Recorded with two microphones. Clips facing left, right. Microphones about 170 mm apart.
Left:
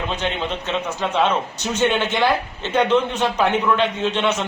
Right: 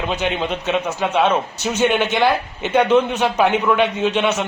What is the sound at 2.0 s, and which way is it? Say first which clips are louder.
A man's voice: right 2 dB; 15° right (ahead or behind).